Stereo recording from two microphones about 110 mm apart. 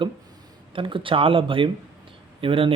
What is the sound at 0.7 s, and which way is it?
Speech, 50° right (ahead or behind).